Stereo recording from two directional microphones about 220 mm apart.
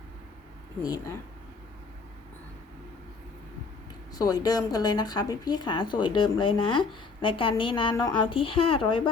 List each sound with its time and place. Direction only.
4.1 s a woman's voice: 15° left (ahead or behind)